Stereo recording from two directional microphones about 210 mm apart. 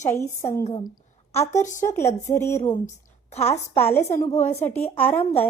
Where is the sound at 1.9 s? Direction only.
15° left (ahead or behind).